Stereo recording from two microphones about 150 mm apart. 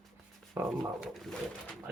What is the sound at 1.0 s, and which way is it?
Speech, centre (ahead or behind).